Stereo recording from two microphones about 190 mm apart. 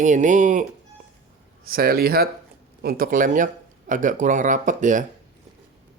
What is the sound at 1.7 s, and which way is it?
Speech, 50° right (ahead or behind).